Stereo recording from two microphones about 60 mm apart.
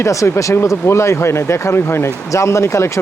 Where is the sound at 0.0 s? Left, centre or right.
Left.